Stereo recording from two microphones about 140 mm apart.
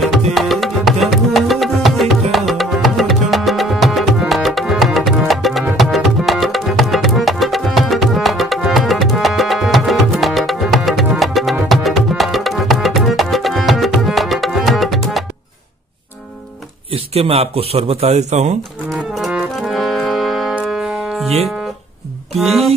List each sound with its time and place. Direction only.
0.0 s music: centre (ahead or behind)
16.9 s speech: 45° right (ahead or behind)
18.9 s music: centre (ahead or behind)
22.4 s music: centre (ahead or behind)